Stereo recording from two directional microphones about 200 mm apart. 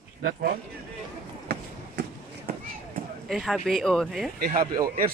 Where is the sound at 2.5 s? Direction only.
50° right (ahead or behind).